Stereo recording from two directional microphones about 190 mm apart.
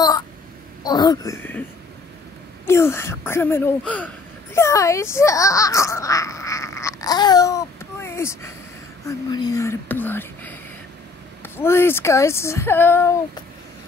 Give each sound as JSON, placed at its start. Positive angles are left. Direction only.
{"t": 0.8, "sound": "speech", "side_deg": 20}
{"t": 2.6, "sound": "a child's voice", "side_deg": 15}